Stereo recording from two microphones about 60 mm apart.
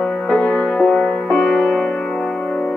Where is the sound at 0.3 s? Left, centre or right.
Centre.